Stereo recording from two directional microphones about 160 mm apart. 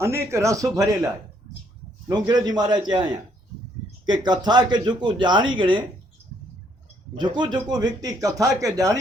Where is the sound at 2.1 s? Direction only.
25° right (ahead or behind).